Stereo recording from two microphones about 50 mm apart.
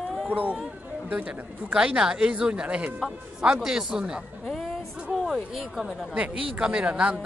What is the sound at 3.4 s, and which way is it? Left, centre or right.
Speech, centre.